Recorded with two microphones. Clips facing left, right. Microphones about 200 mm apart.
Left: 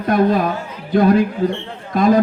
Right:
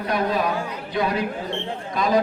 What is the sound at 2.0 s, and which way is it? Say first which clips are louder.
Speech: left 7 dB; 50° left (ahead or behind).